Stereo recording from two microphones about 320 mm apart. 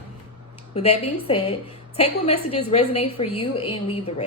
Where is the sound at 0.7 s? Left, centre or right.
Centre.